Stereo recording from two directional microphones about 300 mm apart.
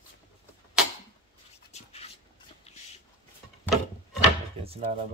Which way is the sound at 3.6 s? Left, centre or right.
Centre.